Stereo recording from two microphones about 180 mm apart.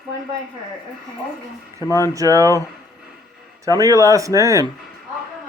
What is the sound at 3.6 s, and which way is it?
Speech, 20° right (ahead or behind).